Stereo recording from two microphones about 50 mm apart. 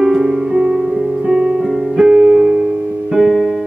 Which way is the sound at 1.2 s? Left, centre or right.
Centre.